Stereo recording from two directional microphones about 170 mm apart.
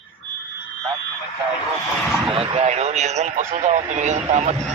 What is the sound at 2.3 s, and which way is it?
Speech, 35° right (ahead or behind).